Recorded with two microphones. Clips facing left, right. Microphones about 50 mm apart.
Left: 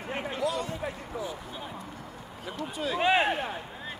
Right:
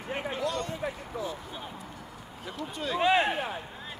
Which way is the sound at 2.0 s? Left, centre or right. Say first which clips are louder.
Left 2 dB; left.